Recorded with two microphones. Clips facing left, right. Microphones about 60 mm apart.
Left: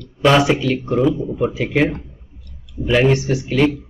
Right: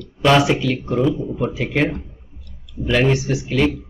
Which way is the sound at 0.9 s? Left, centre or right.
Centre.